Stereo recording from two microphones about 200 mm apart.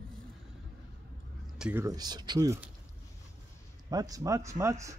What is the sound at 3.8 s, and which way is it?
Speech, 20° right (ahead or behind).